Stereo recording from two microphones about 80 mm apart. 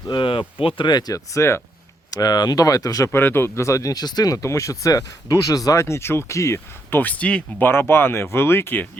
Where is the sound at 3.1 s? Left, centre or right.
Left.